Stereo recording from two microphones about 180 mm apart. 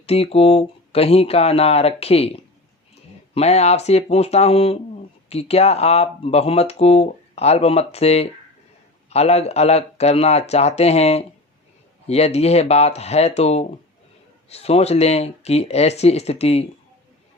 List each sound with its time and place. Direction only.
0.0 s speech: 35° left (ahead or behind)